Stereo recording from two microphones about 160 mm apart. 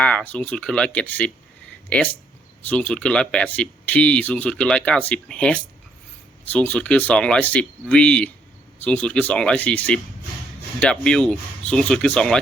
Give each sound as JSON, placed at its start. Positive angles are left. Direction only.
{"t": 0.0, "sound": "speech", "side_deg": 5}
{"t": 2.6, "sound": "speech", "side_deg": 10}